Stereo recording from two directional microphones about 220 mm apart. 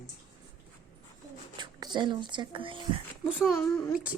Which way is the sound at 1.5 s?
20° right (ahead or behind).